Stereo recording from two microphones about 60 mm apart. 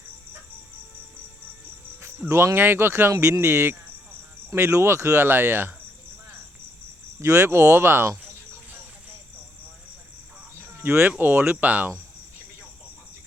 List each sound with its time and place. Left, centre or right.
2.2 s speech: right
2.6 s speech: right
3.1 s speech: right
7.2 s speech: right
10.8 s speech: right